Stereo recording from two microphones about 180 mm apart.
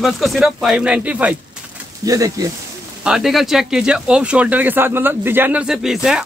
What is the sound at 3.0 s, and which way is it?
Speech, 5° right (ahead or behind).